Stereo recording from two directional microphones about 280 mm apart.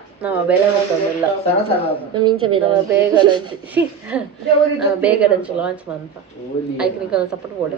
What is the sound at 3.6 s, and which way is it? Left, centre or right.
Speech, centre.